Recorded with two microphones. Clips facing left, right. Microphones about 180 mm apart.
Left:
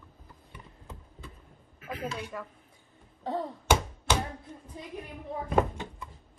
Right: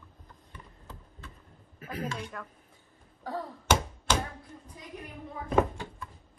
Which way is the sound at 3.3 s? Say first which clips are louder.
Left 3 dB; 25° left (ahead or behind).